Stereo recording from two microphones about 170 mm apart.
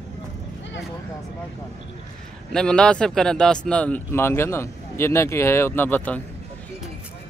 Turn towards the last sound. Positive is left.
turn(degrees=10)  # may be behind; listen again after turning